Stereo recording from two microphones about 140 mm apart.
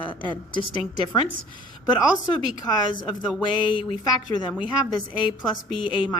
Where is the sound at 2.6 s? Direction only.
35° left (ahead or behind).